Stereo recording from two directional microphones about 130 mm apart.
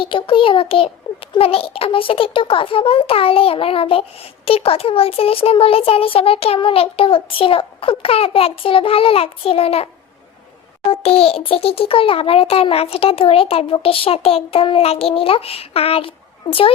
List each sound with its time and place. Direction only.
0.0 s a child's voice: 40° left (ahead or behind)
11.0 s a child's voice: 50° left (ahead or behind)